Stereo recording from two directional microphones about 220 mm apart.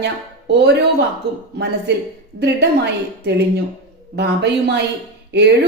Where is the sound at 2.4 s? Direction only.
50° right (ahead or behind).